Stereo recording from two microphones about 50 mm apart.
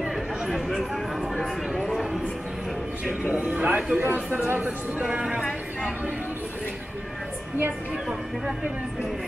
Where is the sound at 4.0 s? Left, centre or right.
Right.